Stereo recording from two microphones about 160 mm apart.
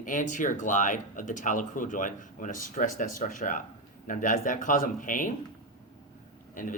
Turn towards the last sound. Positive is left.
turn(degrees=55)  # may be behind; listen again after turning